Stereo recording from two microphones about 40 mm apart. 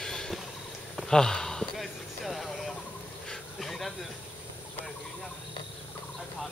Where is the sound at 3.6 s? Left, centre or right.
Centre.